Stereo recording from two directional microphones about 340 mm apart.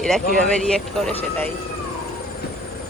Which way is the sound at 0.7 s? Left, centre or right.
Centre.